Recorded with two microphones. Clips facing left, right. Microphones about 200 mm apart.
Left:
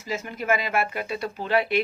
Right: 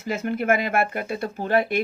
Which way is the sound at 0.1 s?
60° right (ahead or behind).